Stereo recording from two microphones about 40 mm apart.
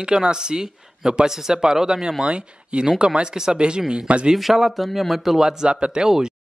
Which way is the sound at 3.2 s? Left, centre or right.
Centre.